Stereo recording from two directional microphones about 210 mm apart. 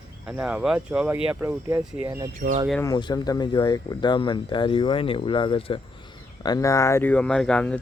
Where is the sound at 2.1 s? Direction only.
20° right (ahead or behind).